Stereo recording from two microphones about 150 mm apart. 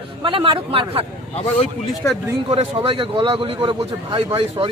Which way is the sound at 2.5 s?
40° right (ahead or behind).